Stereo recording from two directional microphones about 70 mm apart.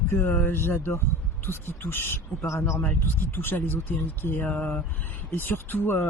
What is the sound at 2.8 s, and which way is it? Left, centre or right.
Speech, left.